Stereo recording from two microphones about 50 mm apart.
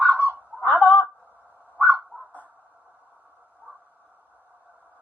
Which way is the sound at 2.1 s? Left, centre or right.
Left.